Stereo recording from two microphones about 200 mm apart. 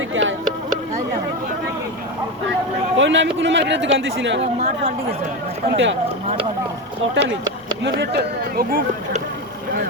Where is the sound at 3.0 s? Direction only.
70° right (ahead or behind).